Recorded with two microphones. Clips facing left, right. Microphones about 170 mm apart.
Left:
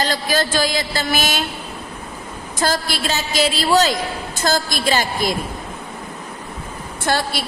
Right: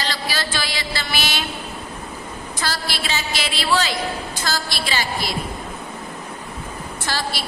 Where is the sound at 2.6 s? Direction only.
45° left (ahead or behind).